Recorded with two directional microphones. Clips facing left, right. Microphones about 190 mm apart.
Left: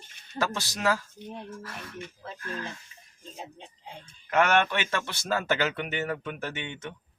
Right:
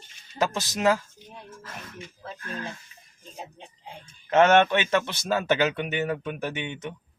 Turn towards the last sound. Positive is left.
turn(degrees=-15)  # may be behind; listen again after turning